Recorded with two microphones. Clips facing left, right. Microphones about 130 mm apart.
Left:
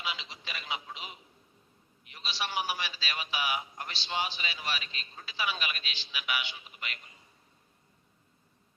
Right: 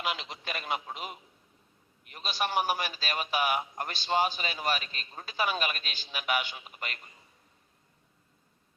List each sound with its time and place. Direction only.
0.0 s telephone: 50° right (ahead or behind)
2.0 s a man's voice: 50° right (ahead or behind)